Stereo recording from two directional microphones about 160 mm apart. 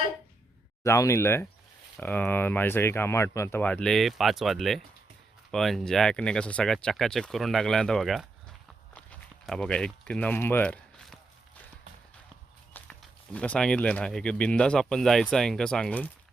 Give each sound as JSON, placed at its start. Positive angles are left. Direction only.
{"t": 0.9, "sound": "speech", "side_deg": 20}
{"t": 9.0, "sound": "a sound", "side_deg": 5}
{"t": 12.7, "sound": "speech", "side_deg": 10}